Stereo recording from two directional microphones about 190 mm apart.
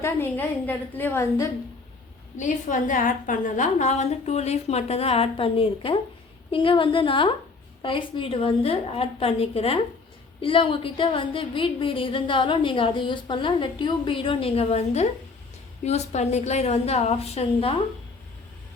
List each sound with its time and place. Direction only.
0.0 s a woman's voice: 10° left (ahead or behind)
2.4 s a woman's voice: 40° left (ahead or behind)